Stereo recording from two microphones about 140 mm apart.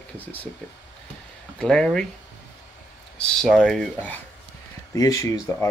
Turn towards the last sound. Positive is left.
turn(degrees=20)  # may be behind; listen again after turning